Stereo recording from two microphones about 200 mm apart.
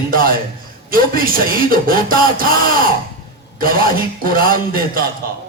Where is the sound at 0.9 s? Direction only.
45° right (ahead or behind).